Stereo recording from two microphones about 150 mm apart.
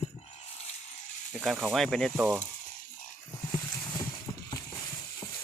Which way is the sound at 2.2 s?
15° right (ahead or behind).